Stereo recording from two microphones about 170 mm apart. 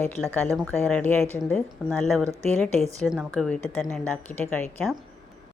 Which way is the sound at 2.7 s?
40° right (ahead or behind).